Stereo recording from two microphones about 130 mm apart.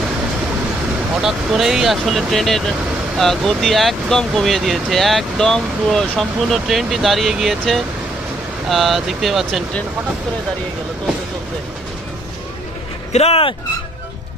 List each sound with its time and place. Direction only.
1.1 s speech: 5° right (ahead or behind)
13.1 s speech: 50° left (ahead or behind)